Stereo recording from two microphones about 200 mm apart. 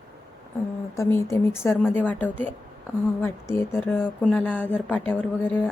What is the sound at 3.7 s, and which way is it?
Speech, 10° left (ahead or behind).